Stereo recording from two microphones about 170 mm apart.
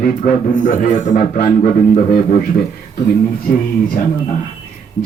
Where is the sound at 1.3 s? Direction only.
60° left (ahead or behind).